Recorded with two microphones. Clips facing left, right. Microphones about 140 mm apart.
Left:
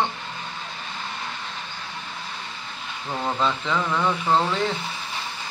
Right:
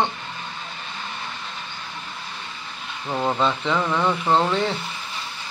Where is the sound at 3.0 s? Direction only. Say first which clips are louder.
Right 4 dB; 15° right (ahead or behind).